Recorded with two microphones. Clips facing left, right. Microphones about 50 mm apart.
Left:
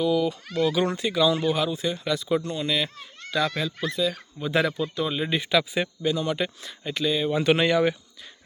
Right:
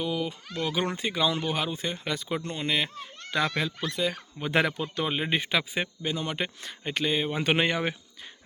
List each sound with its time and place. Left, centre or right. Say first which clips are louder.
0.0 s speech: left 7 dB; right
6.6 s speech: left 2 dB; right
7.3 s speech: left 4 dB; right